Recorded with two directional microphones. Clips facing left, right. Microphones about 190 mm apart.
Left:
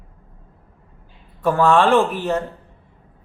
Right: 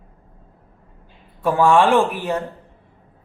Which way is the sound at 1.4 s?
10° right (ahead or behind).